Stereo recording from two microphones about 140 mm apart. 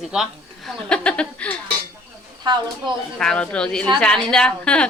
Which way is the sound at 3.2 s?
5° left (ahead or behind).